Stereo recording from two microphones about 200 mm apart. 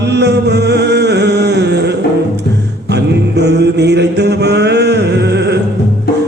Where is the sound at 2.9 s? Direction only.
55° right (ahead or behind).